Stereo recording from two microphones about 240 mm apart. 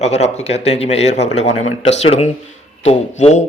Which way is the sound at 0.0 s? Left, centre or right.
Left.